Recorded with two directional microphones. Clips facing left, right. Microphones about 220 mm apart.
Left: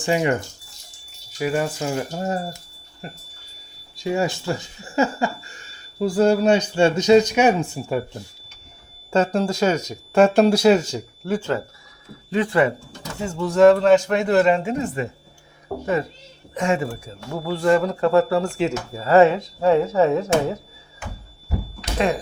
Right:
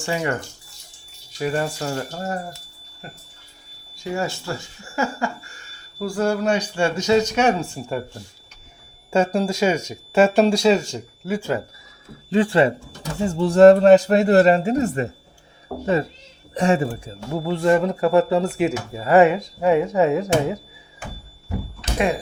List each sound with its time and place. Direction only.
0.0 s speech: 20° left (ahead or behind)
1.4 s speech: 5° left (ahead or behind)
3.9 s speech: 15° left (ahead or behind)
9.1 s speech: 10° right (ahead or behind)
11.3 s speech: 10° right (ahead or behind)
12.3 s speech: 30° right (ahead or behind)
16.6 s speech: 35° right (ahead or behind)
17.3 s speech: 20° right (ahead or behind)